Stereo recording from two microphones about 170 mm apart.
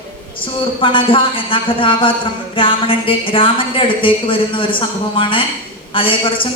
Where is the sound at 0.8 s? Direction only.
30° left (ahead or behind).